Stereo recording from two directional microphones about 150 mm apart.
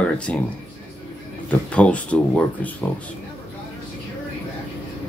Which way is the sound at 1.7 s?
10° left (ahead or behind).